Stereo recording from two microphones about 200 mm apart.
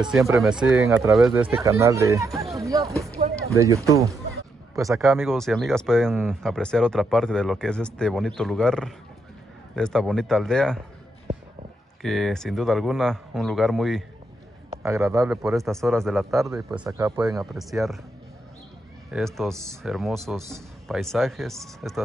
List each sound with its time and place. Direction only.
0.0 s speech: 15° right (ahead or behind)
0.4 s speech: 5° right (ahead or behind)
0.8 s speech: 15° right (ahead or behind)
2.5 s a sound: 15° right (ahead or behind)
3.2 s a sound: 30° right (ahead or behind)
3.5 s speech: 15° right (ahead or behind)
5.0 s speech: centre (ahead or behind)
12.0 s speech: centre (ahead or behind)
14.7 s a man's voice: 15° right (ahead or behind)
15.2 s speech: centre (ahead or behind)
19.0 s speech: centre (ahead or behind)
19.5 s speech: 15° right (ahead or behind)
19.8 s speech: centre (ahead or behind)